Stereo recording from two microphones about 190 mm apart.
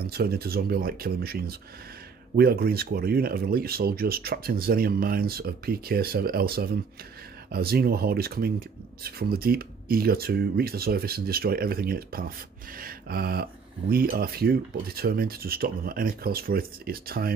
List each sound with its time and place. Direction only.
0.0 s speech: 55° right (ahead or behind)